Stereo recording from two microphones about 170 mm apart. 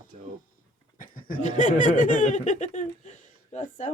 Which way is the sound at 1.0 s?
55° left (ahead or behind).